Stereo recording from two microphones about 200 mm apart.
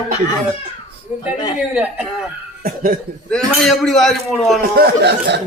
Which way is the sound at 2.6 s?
45° right (ahead or behind).